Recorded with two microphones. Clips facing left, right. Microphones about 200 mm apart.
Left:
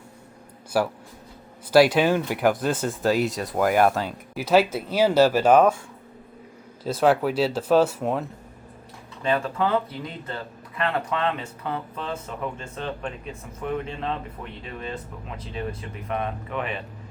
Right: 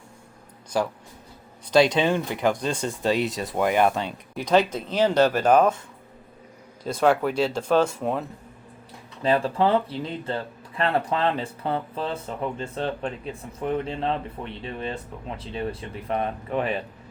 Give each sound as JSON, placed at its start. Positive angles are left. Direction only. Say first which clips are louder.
{"t": 0.7, "sound": "speech", "louder": "left 2 dB", "side_deg": 10}
{"t": 6.8, "sound": "speech", "louder": "left 1 dB", "side_deg": 5}
{"t": 9.2, "sound": "speech", "louder": "right 3 dB", "side_deg": -30}